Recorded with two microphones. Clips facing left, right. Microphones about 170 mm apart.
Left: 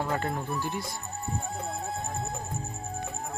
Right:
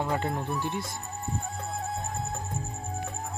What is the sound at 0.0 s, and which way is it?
Music, 10° right (ahead or behind).